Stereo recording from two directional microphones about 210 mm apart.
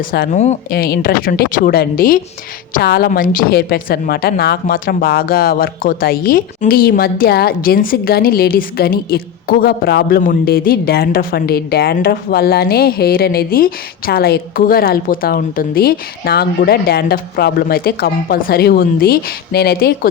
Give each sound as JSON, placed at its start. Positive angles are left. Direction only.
{"t": 0.1, "sound": "a woman's voice", "side_deg": 40}
{"t": 0.7, "sound": "a woman's voice", "side_deg": 45}